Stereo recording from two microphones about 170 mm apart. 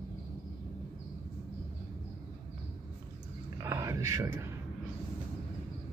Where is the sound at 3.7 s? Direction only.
20° right (ahead or behind).